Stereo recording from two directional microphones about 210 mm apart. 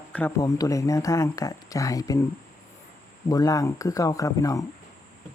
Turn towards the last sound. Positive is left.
turn(degrees=15)  # may be behind; listen again after turning